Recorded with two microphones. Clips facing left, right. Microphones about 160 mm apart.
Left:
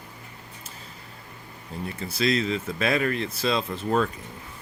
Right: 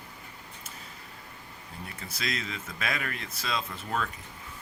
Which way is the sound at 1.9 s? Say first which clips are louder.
Left 12 dB; 30° left (ahead or behind).